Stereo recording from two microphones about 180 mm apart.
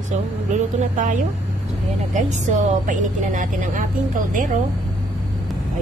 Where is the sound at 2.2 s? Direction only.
40° right (ahead or behind).